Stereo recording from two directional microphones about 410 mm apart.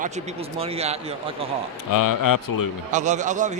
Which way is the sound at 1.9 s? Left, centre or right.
Left.